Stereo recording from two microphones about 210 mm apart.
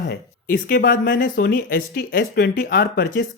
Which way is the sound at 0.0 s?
45° left (ahead or behind).